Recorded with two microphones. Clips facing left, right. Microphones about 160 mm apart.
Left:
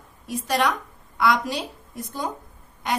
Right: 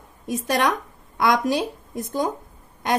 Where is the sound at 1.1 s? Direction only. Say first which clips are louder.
Right 3 dB; 50° right (ahead or behind).